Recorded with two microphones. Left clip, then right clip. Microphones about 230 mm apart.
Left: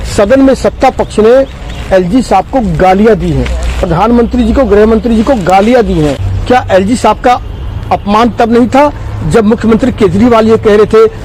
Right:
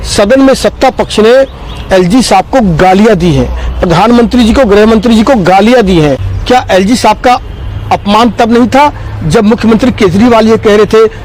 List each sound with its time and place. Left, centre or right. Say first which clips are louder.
0.2 s a man's voice: right 1 dB; right
6.5 s speech: right 1 dB; right